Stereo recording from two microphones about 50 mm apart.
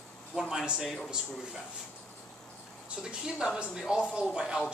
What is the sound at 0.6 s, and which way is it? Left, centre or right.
Speech, centre.